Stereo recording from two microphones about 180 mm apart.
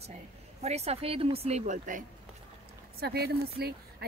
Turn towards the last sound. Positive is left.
turn(degrees=-60)  # may be behind; listen again after turning